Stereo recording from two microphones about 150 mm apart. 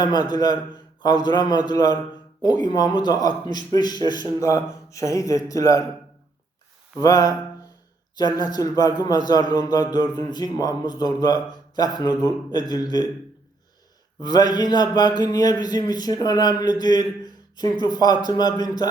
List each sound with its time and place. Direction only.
0.0 s a man's voice: 30° left (ahead or behind)
7.0 s a man's voice: 25° left (ahead or behind)
14.2 s a man's voice: 25° left (ahead or behind)